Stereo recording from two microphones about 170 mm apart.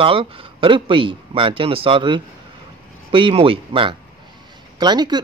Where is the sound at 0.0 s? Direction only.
30° right (ahead or behind).